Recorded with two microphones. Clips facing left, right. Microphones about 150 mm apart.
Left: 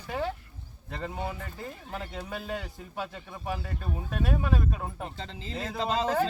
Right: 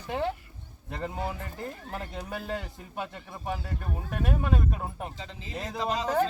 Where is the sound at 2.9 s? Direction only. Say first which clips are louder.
Even; 15° right (ahead or behind).